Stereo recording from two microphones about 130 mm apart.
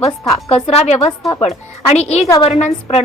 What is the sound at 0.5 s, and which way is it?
A woman's voice, 55° left (ahead or behind).